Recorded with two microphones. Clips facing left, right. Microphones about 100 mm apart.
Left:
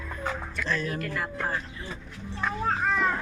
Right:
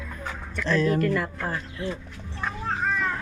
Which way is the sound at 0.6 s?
70° right (ahead or behind).